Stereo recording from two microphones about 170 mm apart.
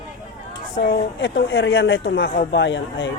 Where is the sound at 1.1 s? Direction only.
90° left.